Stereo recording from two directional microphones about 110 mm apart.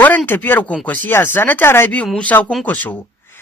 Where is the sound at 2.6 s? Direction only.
15° left (ahead or behind).